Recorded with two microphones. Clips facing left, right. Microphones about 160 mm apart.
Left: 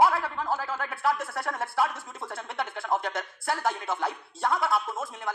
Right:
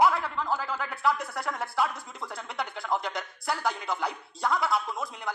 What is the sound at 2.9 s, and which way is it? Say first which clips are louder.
Speech: left 1 dB; 5° left (ahead or behind).